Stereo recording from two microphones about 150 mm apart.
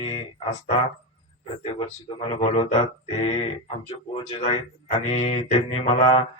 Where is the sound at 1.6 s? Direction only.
35° left (ahead or behind).